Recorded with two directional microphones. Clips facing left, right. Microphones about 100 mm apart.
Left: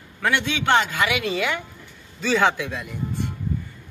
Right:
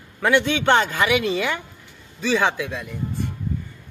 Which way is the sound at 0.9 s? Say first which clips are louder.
Right 3 dB; 30° right (ahead or behind).